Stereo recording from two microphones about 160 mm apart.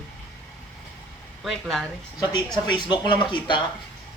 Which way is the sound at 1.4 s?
Centre (ahead or behind).